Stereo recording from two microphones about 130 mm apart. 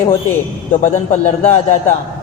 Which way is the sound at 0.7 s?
60° left (ahead or behind).